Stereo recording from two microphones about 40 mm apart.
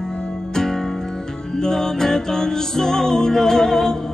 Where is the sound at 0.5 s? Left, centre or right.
Centre.